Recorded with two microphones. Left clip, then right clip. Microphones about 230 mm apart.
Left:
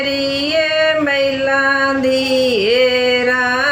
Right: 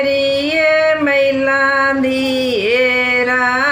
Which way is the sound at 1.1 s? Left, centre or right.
Centre.